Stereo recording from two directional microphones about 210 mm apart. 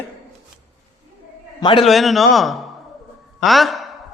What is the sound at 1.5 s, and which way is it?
Speech, 20° left (ahead or behind).